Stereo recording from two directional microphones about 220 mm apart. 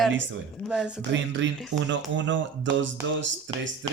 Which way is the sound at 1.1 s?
55° right (ahead or behind).